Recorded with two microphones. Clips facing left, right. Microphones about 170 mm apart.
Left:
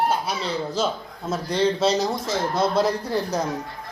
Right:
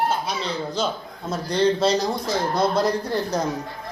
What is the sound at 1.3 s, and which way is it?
A man's voice, 5° left (ahead or behind).